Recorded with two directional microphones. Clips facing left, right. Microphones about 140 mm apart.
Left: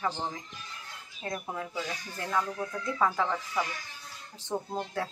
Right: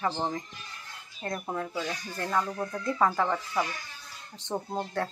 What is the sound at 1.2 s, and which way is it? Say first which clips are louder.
Speech: right 2 dB; 5° left (ahead or behind).